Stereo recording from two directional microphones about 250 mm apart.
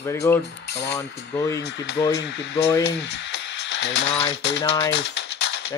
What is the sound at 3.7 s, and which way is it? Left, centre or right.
Typewriter, left.